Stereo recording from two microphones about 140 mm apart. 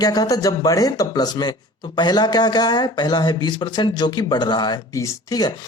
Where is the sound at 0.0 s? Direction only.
25° left (ahead or behind).